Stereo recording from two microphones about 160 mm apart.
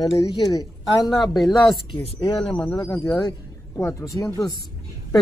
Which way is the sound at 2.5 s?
10° left (ahead or behind).